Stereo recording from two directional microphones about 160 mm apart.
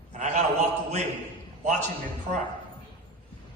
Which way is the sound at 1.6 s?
45° right (ahead or behind).